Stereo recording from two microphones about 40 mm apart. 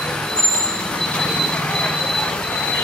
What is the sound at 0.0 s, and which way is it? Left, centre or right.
Vehicle, centre.